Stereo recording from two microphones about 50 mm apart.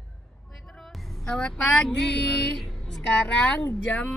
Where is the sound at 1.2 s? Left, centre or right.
Centre.